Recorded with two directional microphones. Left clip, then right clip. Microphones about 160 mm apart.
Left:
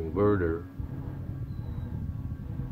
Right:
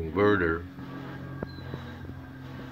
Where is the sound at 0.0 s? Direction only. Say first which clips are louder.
Right 2 dB; 10° left (ahead or behind).